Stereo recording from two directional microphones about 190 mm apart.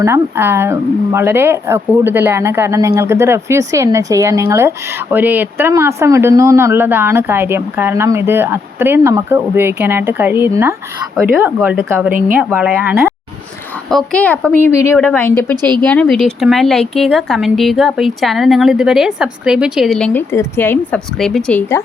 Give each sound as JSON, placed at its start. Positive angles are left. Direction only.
{"t": 0.0, "sound": "speech", "side_deg": -15}
{"t": 13.9, "sound": "a woman's voice", "side_deg": 5}
{"t": 15.5, "sound": "speech", "side_deg": -25}
{"t": 15.8, "sound": "speech", "side_deg": 5}
{"t": 20.3, "sound": "a woman's voice", "side_deg": 15}